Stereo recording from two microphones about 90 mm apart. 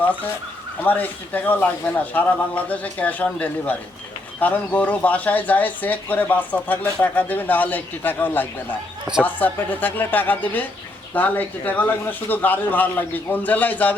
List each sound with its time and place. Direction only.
0.0 s speech: 20° left (ahead or behind)